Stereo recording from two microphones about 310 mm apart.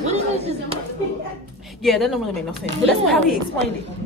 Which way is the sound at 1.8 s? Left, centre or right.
Centre.